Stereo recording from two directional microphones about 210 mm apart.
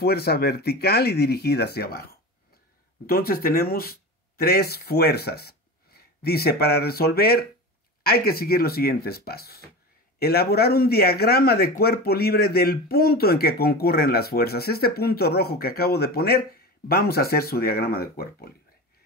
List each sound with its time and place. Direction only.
0.0 s speech: 50° left (ahead or behind)